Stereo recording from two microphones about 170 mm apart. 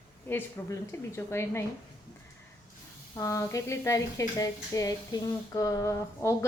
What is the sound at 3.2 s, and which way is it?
A woman's voice, 20° left (ahead or behind).